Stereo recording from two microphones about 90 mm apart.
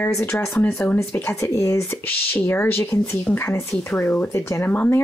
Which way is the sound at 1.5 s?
35° left (ahead or behind).